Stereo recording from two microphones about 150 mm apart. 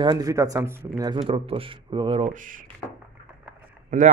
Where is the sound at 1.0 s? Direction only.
35° right (ahead or behind); by 2.6 s 60° right (ahead or behind).